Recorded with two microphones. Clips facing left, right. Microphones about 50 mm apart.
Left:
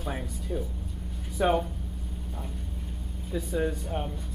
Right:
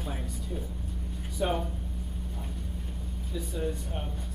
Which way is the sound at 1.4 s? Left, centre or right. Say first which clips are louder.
Left 5 dB; left.